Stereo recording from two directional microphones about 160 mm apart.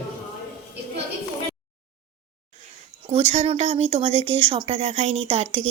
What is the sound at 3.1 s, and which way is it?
Speech, 40° right (ahead or behind).